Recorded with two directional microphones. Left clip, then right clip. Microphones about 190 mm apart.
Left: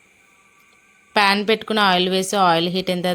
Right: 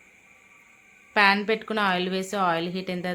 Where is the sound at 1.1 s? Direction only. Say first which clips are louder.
Left 4 dB; 35° left (ahead or behind).